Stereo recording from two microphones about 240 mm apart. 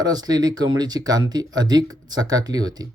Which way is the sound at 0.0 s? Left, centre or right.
Centre.